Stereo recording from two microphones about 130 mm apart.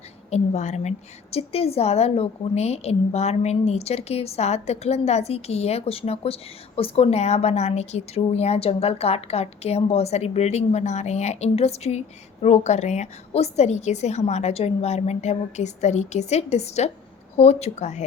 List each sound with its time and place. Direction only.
0.3 s a woman's voice: 60° left (ahead or behind)